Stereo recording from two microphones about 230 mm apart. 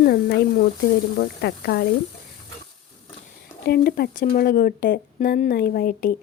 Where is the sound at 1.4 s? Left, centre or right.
Left.